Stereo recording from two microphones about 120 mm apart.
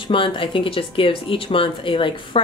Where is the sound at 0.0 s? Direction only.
45° left (ahead or behind).